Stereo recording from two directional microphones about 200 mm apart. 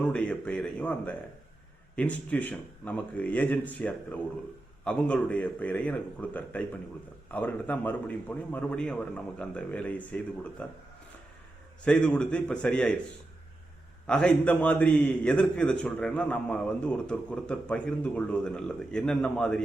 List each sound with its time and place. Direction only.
0.0 s a man's voice: 5° left (ahead or behind)
11.9 s a man's voice: 5° left (ahead or behind)
14.1 s a man's voice: 5° left (ahead or behind)